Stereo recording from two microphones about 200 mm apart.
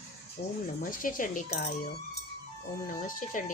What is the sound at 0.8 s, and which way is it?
Speech, 45° left (ahead or behind).